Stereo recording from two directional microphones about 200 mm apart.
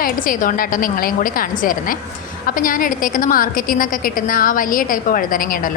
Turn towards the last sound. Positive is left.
turn(degrees=45)  # may be behind; listen again after turning